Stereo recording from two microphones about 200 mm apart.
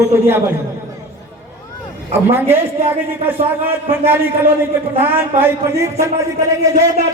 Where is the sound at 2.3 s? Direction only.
10° right (ahead or behind).